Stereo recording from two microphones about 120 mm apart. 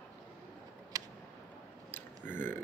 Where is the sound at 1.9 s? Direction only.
15° left (ahead or behind).